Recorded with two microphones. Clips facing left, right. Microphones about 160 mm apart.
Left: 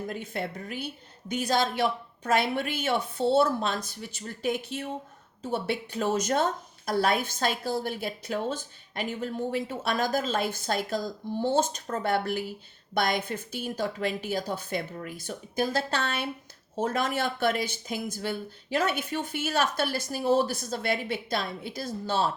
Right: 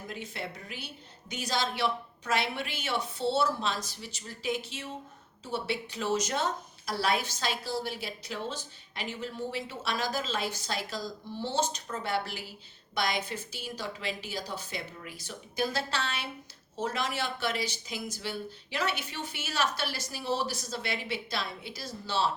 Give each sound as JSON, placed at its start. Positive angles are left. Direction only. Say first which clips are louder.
{"t": 0.1, "sound": "a woman's voice", "louder": "left 5 dB", "side_deg": 50}